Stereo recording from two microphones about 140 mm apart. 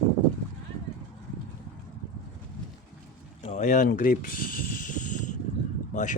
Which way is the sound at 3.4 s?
55° left (ahead or behind).